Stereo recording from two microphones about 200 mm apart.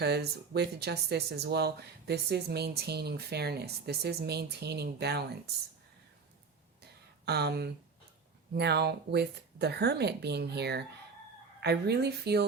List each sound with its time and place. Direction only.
0.0 s speech: 55° right (ahead or behind)
6.8 s a sound: 55° right (ahead or behind)
8.5 s speech: 55° right (ahead or behind)